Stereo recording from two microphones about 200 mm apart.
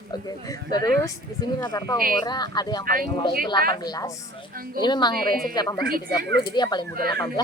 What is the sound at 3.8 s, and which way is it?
A woman's voice, 20° left (ahead or behind).